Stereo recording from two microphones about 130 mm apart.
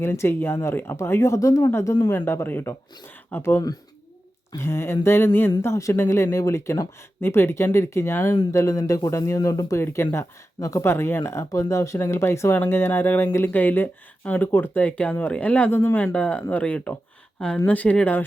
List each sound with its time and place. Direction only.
0.0 s speech: 20° left (ahead or behind)